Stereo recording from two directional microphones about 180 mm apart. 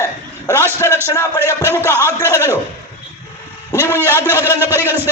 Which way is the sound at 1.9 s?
15° right (ahead or behind).